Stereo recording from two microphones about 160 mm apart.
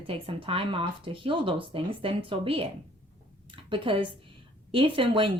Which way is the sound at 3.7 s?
30° right (ahead or behind).